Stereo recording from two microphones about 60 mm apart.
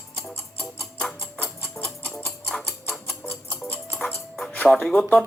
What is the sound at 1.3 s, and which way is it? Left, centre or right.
Rodents, left.